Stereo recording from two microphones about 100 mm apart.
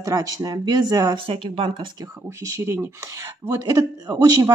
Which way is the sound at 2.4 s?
25° right (ahead or behind).